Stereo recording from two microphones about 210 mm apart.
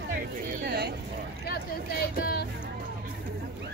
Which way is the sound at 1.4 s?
45° left (ahead or behind).